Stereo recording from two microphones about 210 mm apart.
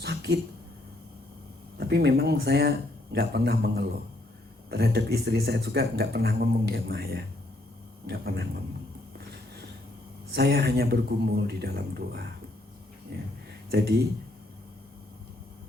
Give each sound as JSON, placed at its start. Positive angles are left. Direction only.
{"t": 0.0, "sound": "a sound", "side_deg": -50}
{"t": 1.8, "sound": "speech", "side_deg": -50}
{"t": 10.3, "sound": "speech", "side_deg": -50}